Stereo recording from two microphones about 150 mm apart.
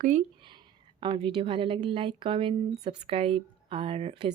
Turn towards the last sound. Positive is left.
turn(degrees=-40)  # may be behind; listen again after turning